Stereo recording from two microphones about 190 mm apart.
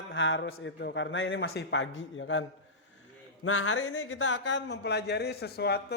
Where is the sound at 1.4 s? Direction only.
65° left (ahead or behind).